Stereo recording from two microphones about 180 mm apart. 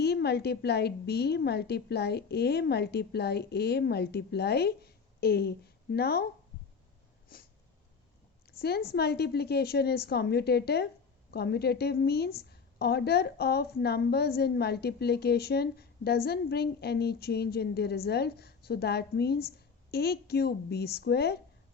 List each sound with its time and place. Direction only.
0.0 s a woman's voice: 65° left (ahead or behind)
7.3 s a sound: 55° left (ahead or behind)
8.4 s a woman's voice: 60° left (ahead or behind)